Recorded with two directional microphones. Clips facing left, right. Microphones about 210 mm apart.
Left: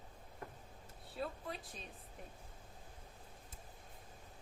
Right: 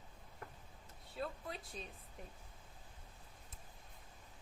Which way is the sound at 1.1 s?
Centre (ahead or behind).